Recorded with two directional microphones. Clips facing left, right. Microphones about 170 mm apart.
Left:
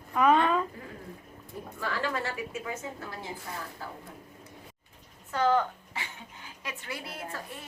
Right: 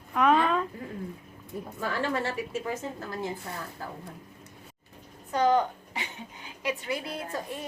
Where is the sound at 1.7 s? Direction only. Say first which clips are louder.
Right 2 dB; 25° right (ahead or behind).